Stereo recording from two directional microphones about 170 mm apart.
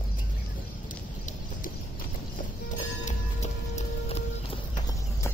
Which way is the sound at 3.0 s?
40° left (ahead or behind).